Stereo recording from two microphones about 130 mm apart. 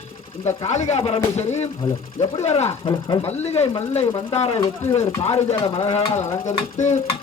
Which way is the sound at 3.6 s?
55° left (ahead or behind).